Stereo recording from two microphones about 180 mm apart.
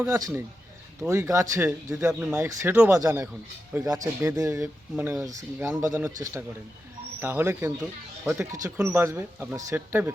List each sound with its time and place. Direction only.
0.1 s speech: 20° right (ahead or behind)
2.3 s speech: 15° right (ahead or behind)
5.5 s speech: 5° right (ahead or behind)
5.8 s speech: 20° right (ahead or behind)